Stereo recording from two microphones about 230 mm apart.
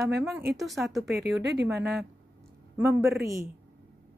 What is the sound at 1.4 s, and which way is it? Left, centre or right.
Speech, right.